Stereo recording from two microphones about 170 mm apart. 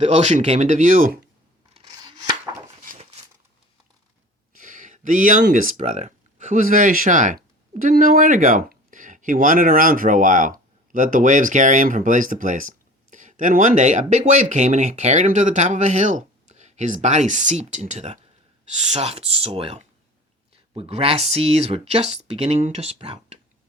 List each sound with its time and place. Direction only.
0.0 s speech: 40° right (ahead or behind)
1.8 s scissors: 25° right (ahead or behind)
4.6 s a sound: 50° right (ahead or behind)
5.5 s speech: 45° right (ahead or behind)